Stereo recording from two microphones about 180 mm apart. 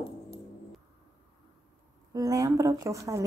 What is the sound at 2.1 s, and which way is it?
A woman's voice, 20° right (ahead or behind).